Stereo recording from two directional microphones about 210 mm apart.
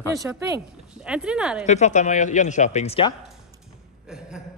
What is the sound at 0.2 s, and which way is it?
Speech, 15° right (ahead or behind).